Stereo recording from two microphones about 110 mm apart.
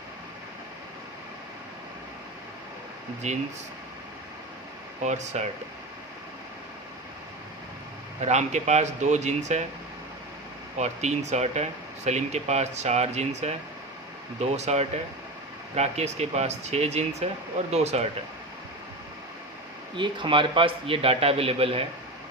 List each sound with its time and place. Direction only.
3.2 s speech: 90° right
5.0 s speech: 90° right
8.2 s speech: 90° right
10.8 s speech: 90° right
15.7 s speech: 80° right
20.0 s a man's voice: 50° right (ahead or behind)